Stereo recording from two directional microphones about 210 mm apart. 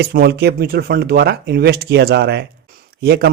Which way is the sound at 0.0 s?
50° right (ahead or behind).